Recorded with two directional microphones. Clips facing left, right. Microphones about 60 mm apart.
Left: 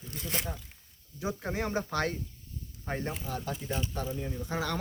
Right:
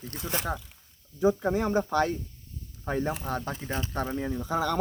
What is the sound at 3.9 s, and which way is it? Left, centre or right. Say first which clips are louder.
Speech: right 4 dB; right.